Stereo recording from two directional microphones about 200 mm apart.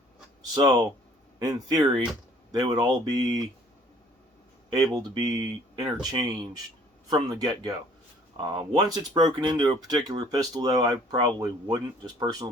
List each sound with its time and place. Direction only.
0.5 s speech: 20° right (ahead or behind)
4.7 s speech: 20° right (ahead or behind)